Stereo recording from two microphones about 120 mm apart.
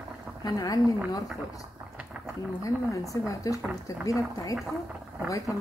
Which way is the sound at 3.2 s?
30° left (ahead or behind).